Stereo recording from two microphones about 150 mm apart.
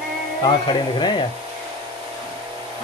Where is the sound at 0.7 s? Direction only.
30° left (ahead or behind).